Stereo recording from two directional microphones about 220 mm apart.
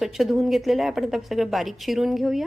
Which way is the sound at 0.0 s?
Centre (ahead or behind).